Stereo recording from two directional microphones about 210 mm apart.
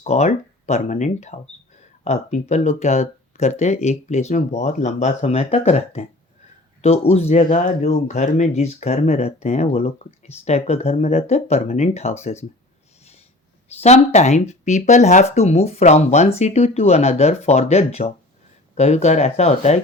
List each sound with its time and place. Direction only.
0.0 s speech: 35° left (ahead or behind)
13.8 s speech: 30° left (ahead or behind)